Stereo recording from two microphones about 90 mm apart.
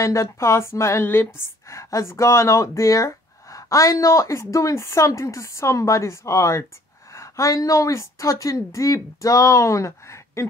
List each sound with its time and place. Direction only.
0.0 s a woman's voice: 35° left (ahead or behind)